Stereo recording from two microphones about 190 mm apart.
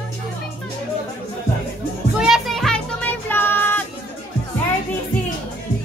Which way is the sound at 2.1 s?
Centre (ahead or behind).